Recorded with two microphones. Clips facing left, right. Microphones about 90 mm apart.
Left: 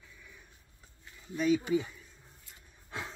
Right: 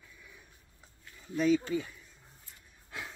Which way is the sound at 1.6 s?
15° left (ahead or behind).